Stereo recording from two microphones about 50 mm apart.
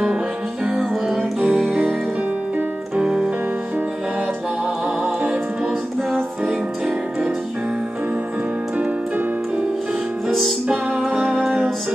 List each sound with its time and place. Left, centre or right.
1.0 s music: centre
3.0 s keyboard: centre
4.8 s music: right
11.1 s music: centre